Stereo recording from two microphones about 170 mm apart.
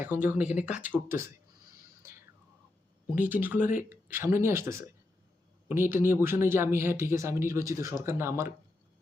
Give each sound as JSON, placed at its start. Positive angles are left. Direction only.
{"t": 0.0, "sound": "speech", "side_deg": -10}
{"t": 3.2, "sound": "speech", "side_deg": -10}